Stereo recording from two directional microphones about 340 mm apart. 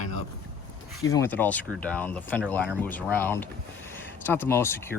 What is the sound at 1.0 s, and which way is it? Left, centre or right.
Speech, centre.